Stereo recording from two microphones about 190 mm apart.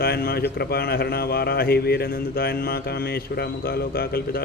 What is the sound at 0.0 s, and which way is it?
Mantra, 55° left (ahead or behind).